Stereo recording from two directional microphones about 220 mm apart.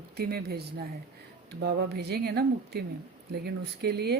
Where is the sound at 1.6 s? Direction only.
45° right (ahead or behind).